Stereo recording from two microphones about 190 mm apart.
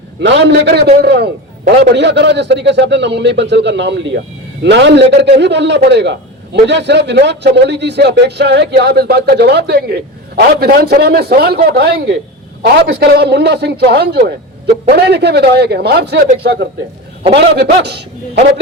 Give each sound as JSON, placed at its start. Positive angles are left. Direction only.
{"t": 0.2, "sound": "a man's voice", "side_deg": -65}